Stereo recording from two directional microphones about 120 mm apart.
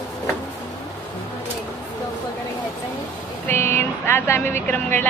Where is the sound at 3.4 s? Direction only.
20° left (ahead or behind).